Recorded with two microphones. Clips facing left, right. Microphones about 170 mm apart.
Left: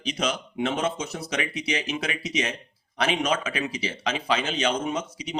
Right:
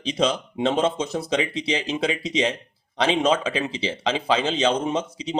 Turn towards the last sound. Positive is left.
turn(degrees=-25)  # may be behind; listen again after turning